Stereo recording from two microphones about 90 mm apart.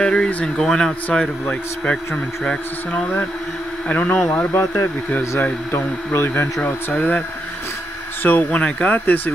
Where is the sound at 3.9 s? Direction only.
20° left (ahead or behind).